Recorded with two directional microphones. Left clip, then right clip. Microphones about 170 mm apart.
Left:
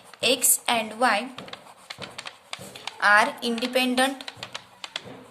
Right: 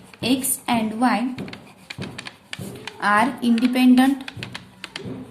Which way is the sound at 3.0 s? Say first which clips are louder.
Even; 25° left (ahead or behind).